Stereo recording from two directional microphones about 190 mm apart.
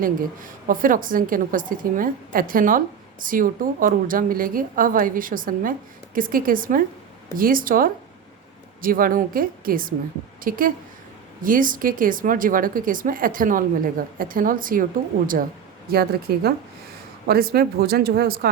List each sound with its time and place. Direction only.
0.0 s a woman's voice: 45° right (ahead or behind)
15.9 s a woman's voice: 55° right (ahead or behind)